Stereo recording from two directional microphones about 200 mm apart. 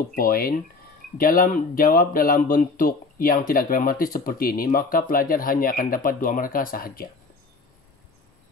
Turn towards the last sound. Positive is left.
turn(degrees=45)  # may be behind; listen again after turning